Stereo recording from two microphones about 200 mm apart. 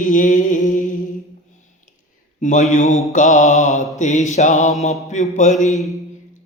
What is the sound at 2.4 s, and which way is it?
Mantra, 40° left (ahead or behind).